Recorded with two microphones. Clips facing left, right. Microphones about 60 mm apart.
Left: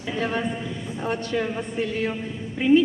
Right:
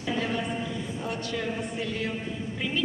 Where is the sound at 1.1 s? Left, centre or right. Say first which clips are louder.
Left 9 dB; left.